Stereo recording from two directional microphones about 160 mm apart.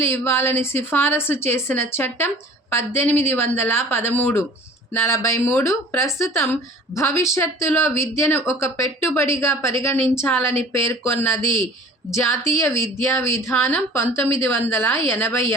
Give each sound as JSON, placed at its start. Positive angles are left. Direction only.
{"t": 0.0, "sound": "a woman's voice", "side_deg": 15}